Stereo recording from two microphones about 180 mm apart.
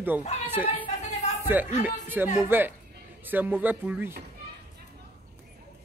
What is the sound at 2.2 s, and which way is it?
Speech, 5° right (ahead or behind).